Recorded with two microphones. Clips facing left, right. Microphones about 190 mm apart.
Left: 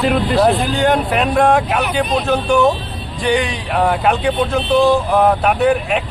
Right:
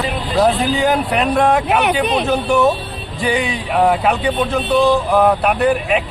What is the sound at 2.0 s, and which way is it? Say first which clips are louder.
Speech: right 1 dB; 70° right (ahead or behind).